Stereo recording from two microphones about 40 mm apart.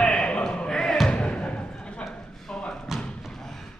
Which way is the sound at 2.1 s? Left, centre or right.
Left.